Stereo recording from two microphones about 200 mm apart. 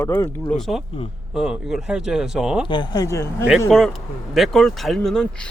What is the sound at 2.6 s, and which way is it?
Speech, 20° left (ahead or behind).